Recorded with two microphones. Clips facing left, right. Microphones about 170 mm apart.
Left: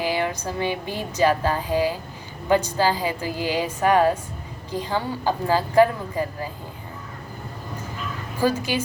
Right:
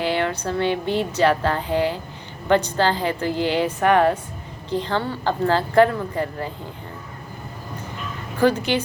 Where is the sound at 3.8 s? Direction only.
60° right (ahead or behind).